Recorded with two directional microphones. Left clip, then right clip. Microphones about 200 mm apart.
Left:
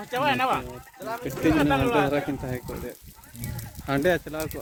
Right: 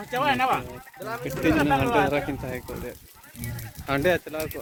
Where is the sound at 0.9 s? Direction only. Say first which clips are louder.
Even; 65° left (ahead or behind).